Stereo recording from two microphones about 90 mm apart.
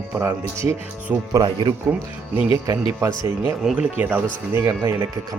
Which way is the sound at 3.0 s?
30° right (ahead or behind).